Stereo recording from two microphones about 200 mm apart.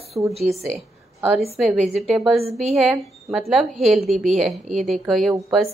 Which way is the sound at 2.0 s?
5° right (ahead or behind).